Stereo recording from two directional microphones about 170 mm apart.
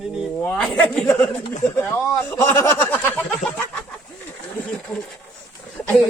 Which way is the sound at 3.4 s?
5° left (ahead or behind).